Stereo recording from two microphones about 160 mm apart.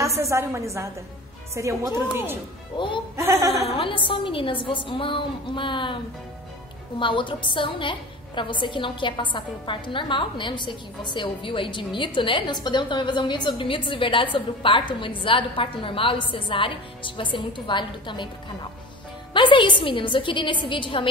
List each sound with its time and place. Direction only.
0.0 s a woman's voice: 20° right (ahead or behind)
2.8 s a woman's voice: 30° left (ahead or behind)
3.2 s a woman's voice: 20° right (ahead or behind)
3.6 s a woman's voice: 35° left (ahead or behind)
7.0 s a woman's voice: 30° left (ahead or behind)
19.3 s a woman's voice: 30° left (ahead or behind)